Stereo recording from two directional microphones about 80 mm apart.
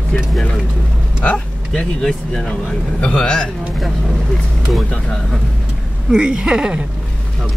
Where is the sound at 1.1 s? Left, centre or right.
Centre.